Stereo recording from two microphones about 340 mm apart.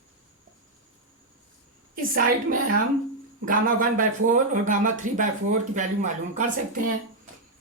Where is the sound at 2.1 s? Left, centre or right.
Right.